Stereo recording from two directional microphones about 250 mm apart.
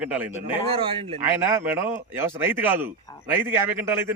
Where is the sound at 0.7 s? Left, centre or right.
Right.